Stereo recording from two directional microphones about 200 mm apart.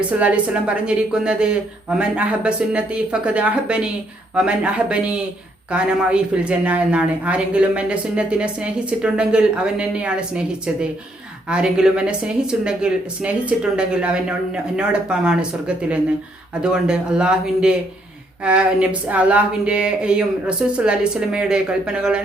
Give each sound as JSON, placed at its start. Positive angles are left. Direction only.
{"t": 0.1, "sound": "a woman's voice", "side_deg": -5}